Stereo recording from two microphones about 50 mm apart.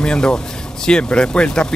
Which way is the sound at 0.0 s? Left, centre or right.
Centre.